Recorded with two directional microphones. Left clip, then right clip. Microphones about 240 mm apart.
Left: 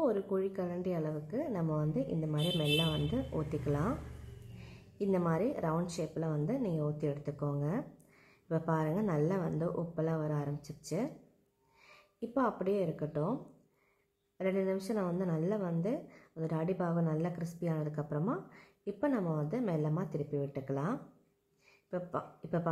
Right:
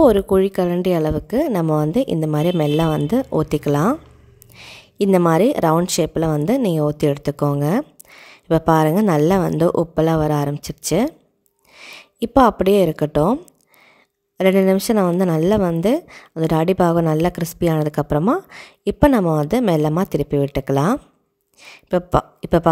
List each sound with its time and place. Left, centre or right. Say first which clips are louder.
0.0 s a woman's voice: right 19 dB; right
14.4 s a woman's voice: right 18 dB; right